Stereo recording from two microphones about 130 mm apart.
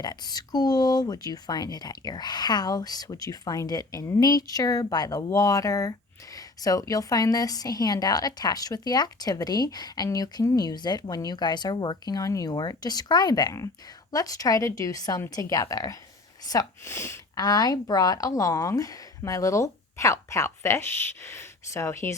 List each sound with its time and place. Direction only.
0.0 s a woman's voice: 30° left (ahead or behind)